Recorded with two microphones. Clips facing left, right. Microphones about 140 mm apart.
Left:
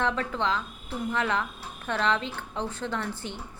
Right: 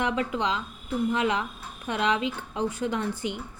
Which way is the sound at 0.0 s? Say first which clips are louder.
Right 1 dB; 15° right (ahead or behind).